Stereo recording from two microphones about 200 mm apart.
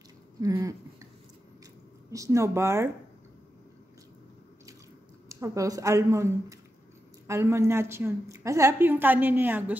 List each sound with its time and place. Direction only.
0.4 s a woman's voice: 15° right (ahead or behind)
2.0 s a woman's voice: 15° right (ahead or behind)
5.3 s a woman's voice: 15° right (ahead or behind)